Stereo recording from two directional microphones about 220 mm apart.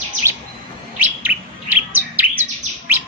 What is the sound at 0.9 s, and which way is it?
Bird, 5° right (ahead or behind).